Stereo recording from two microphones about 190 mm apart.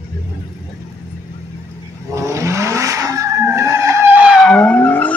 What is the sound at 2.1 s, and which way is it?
Skidding, 15° right (ahead or behind).